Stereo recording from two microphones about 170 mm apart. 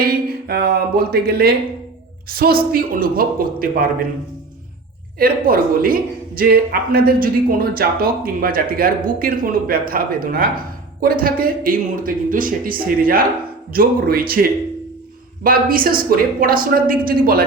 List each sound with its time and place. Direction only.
0.0 s speech: 65° right (ahead or behind)
5.2 s speech: 60° right (ahead or behind)
15.4 s speech: 55° right (ahead or behind)